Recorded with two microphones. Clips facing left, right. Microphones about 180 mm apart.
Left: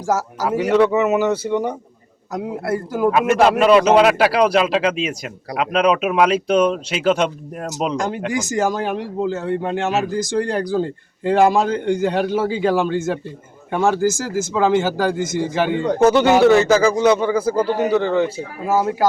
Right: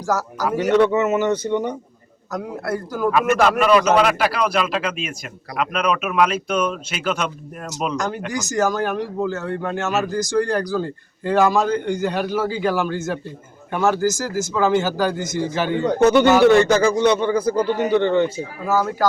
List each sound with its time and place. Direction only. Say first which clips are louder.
0.0 s speech: left 2 dB; 25° left (ahead or behind)
0.7 s speech: left 1 dB; 5° left (ahead or behind)
2.3 s speech: left 3 dB; 25° left (ahead or behind)
16.0 s speech: even; 10° left (ahead or behind)
18.6 s speech: left 2 dB; 25° left (ahead or behind)